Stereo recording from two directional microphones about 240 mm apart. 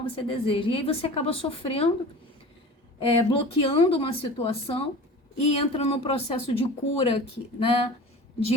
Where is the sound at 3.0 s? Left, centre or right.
Left.